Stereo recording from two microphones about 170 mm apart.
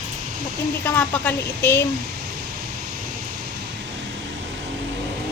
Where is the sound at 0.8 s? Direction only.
10° left (ahead or behind).